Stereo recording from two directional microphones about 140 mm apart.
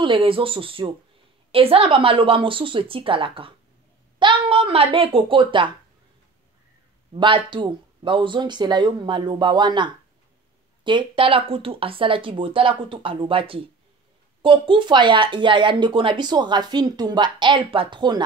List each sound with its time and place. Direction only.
0.0 s speech: 40° right (ahead or behind)
7.2 s speech: 35° right (ahead or behind)